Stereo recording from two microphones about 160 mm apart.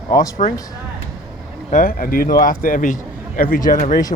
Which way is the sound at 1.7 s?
60° left (ahead or behind).